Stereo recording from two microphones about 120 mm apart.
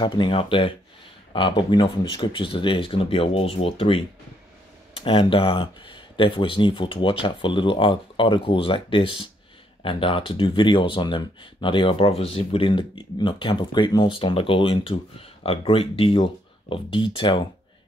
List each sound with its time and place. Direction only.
0.0 s speech: 40° left (ahead or behind)
5.0 s speech: 45° left (ahead or behind)